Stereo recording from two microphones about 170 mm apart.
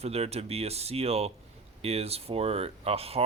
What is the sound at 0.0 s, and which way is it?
Speech, 40° right (ahead or behind).